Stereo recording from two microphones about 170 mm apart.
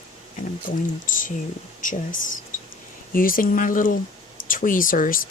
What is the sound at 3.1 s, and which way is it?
Speech, 55° left (ahead or behind).